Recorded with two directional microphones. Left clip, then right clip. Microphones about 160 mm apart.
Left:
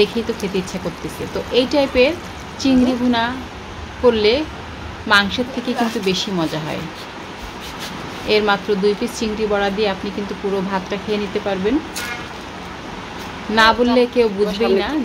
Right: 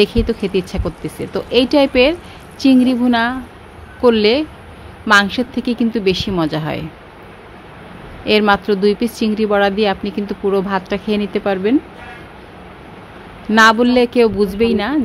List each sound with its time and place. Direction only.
0.0 s speech: 50° right (ahead or behind)
8.3 s speech: 50° right (ahead or behind)
13.6 s speech: 50° right (ahead or behind)